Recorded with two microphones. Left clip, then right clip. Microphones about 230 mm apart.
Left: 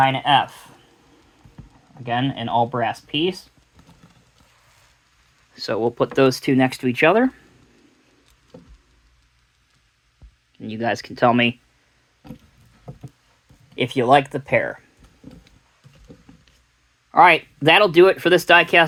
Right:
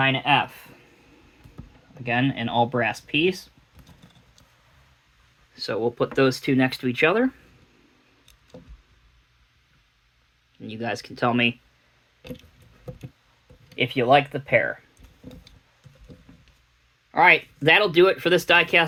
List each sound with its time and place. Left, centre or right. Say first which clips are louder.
0.0 s speech: left 4 dB; left
2.0 s speech: left 1 dB; centre
5.5 s speech: left 4 dB; left
10.6 s speech: left 6 dB; left
13.7 s speech: left 3 dB; left
17.1 s speech: left 4 dB; left